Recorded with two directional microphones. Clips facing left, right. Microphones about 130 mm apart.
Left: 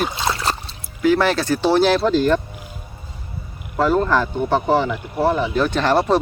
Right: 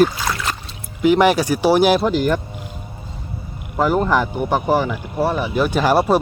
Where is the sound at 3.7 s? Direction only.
15° right (ahead or behind).